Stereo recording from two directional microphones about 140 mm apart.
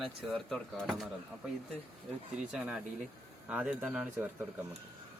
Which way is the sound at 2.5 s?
5° right (ahead or behind).